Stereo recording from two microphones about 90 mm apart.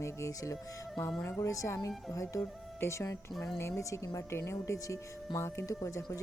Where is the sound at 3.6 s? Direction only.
30° left (ahead or behind).